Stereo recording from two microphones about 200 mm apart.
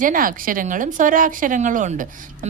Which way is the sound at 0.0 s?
45° right (ahead or behind).